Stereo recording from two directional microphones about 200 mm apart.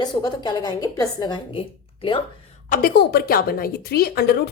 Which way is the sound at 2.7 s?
50° left (ahead or behind).